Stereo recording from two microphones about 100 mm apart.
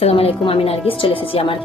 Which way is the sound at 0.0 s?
85° left.